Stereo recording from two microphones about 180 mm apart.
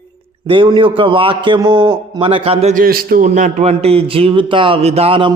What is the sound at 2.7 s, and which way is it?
A man's voice, 55° right (ahead or behind).